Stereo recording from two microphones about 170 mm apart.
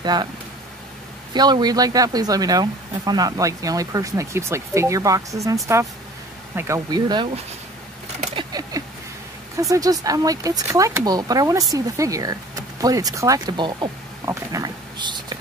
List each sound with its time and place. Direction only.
0.0 s speech: 25° right (ahead or behind)
1.3 s speech: 25° right (ahead or behind)
8.4 s a sound: 25° right (ahead or behind)
9.6 s speech: 20° right (ahead or behind)